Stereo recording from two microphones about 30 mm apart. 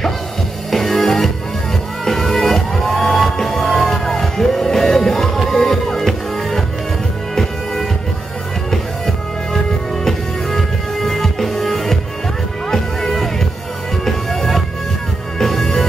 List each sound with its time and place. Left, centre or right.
0.7 s music: centre
8.6 s music: centre